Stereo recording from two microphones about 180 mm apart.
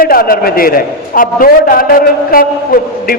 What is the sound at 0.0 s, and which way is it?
A man's voice, 55° left (ahead or behind).